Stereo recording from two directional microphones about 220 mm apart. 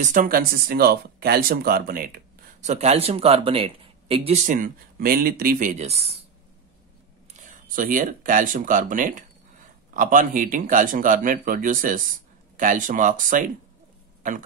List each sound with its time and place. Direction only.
0.0 s speech: 40° right (ahead or behind)
7.4 s speech: 35° right (ahead or behind)